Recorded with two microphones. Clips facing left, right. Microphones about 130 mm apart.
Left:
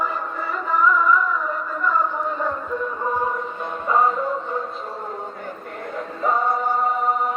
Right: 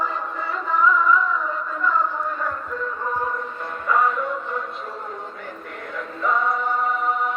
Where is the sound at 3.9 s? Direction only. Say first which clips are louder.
Left 1 dB; 30° left (ahead or behind).